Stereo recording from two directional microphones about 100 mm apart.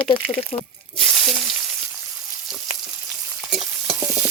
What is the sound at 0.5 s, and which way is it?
Speech, 65° left (ahead or behind).